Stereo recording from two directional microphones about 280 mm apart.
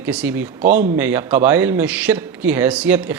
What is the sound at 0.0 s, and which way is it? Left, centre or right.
A man's voice, centre.